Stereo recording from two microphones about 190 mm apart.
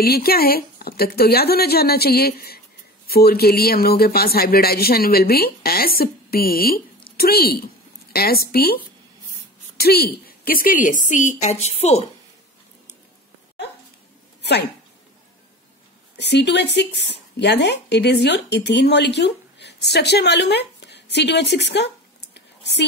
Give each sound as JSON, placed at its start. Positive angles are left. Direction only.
{"t": 0.0, "sound": "a woman's voice", "side_deg": 55}
{"t": 9.8, "sound": "speech", "side_deg": 55}
{"t": 16.2, "sound": "speech", "side_deg": 65}